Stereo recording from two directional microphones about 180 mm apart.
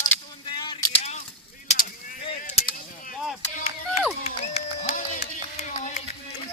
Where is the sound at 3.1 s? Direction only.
Centre (ahead or behind).